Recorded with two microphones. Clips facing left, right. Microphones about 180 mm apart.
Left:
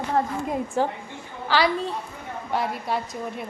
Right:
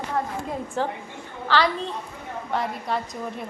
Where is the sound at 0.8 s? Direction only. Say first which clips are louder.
Left 2 dB; 10° left (ahead or behind).